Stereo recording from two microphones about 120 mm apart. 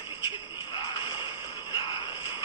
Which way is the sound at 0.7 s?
35° left (ahead or behind).